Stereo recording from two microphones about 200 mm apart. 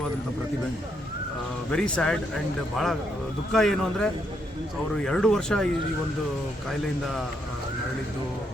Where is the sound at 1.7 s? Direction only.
5° left (ahead or behind).